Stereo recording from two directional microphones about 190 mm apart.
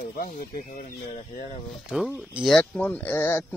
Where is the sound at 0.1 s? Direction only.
50° left (ahead or behind).